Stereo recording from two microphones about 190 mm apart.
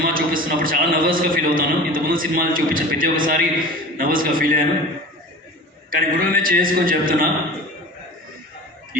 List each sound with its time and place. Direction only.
0.0 s a man's voice: 50° right (ahead or behind)
5.9 s a man's voice: 50° right (ahead or behind)